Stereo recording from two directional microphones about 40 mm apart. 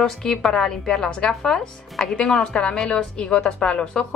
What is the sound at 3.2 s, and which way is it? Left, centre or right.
Speech, centre.